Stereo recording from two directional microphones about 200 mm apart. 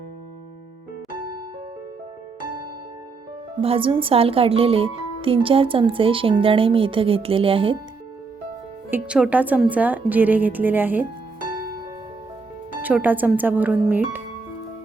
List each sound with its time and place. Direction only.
3.6 s speech: 25° right (ahead or behind)
8.9 s a woman's voice: 5° right (ahead or behind)
12.8 s a woman's voice: 10° right (ahead or behind)